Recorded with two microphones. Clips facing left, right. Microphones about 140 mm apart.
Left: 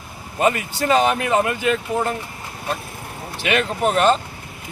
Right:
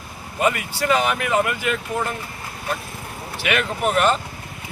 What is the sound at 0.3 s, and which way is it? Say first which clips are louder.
Speech: left 2 dB; 30° left (ahead or behind).